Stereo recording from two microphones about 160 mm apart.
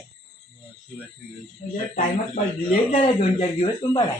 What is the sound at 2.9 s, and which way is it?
Speech, 35° left (ahead or behind).